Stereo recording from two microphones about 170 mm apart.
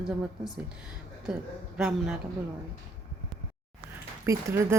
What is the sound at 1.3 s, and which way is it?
Speech, 5° right (ahead or behind).